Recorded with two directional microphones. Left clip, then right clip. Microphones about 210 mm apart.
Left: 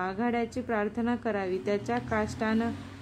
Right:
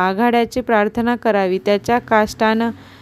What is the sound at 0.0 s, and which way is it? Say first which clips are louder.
A woman's voice: right 15 dB; 40° right (ahead or behind).